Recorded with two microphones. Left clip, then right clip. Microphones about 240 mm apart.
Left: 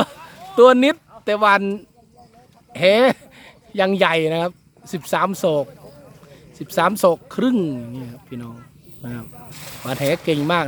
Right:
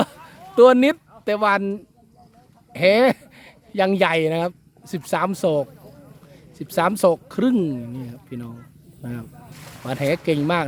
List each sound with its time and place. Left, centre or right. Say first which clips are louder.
0.5 s speech: left 1 dB; centre
9.5 s a sound: left 5 dB; left
10.2 s speech: left 2 dB; centre